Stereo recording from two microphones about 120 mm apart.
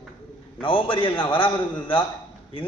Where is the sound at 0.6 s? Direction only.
45° left (ahead or behind).